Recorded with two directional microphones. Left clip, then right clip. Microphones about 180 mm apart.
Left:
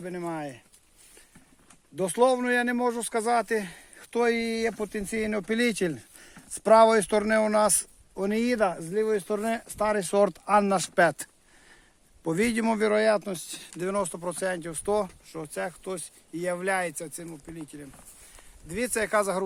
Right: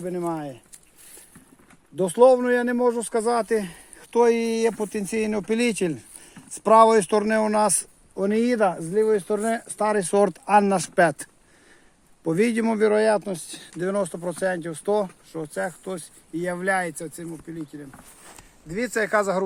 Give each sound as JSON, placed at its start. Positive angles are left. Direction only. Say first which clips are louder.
{"t": 0.0, "sound": "speech", "louder": "right 5 dB", "side_deg": 30}
{"t": 2.0, "sound": "speech", "louder": "right 7 dB", "side_deg": 25}